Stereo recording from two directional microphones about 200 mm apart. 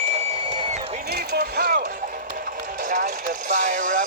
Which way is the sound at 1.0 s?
50° right (ahead or behind).